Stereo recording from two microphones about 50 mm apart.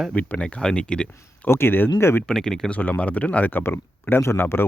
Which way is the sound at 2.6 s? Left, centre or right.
Left.